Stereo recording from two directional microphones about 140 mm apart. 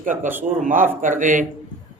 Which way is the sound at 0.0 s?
70° right (ahead or behind).